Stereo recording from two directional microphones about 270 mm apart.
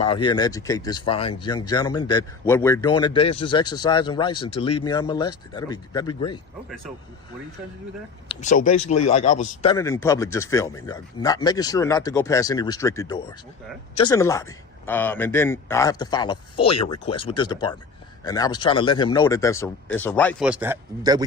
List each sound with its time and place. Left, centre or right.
0.0 s a man's voice: centre
8.3 s speech: left
9.6 s a man's voice: centre